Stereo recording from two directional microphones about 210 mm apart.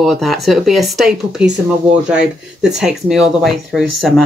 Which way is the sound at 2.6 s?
Centre (ahead or behind).